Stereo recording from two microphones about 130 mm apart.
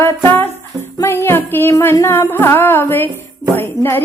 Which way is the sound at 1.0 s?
20° left (ahead or behind).